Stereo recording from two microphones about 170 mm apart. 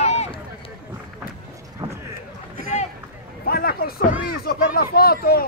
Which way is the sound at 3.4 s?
60° left (ahead or behind).